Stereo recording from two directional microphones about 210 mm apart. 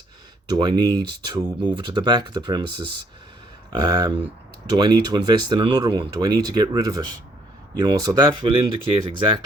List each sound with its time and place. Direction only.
0.4 s speech: 20° right (ahead or behind)